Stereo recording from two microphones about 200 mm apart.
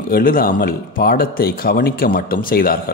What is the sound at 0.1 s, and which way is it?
Speech, 45° left (ahead or behind).